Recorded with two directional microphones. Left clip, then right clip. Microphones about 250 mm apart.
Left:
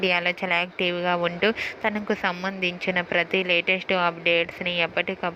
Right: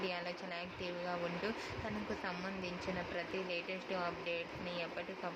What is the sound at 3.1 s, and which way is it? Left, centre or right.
Speech, left.